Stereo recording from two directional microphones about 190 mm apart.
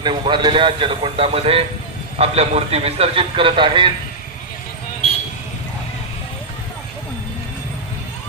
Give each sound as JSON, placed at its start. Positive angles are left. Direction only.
{"t": 0.0, "sound": "a man's voice", "side_deg": -25}